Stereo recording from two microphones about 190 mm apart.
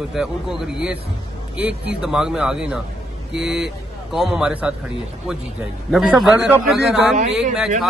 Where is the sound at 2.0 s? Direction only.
5° right (ahead or behind).